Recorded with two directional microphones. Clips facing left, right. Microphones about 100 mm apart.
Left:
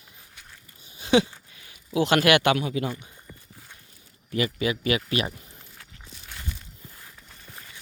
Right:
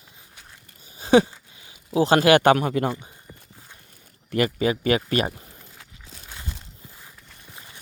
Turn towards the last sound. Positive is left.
turn(degrees=-20)  # may be behind; listen again after turning